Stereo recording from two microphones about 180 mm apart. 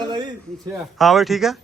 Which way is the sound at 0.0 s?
25° right (ahead or behind).